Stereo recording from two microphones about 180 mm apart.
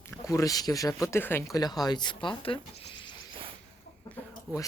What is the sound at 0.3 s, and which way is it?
Speech, 20° left (ahead or behind).